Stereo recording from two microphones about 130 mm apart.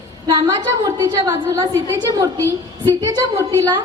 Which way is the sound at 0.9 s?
25° right (ahead or behind).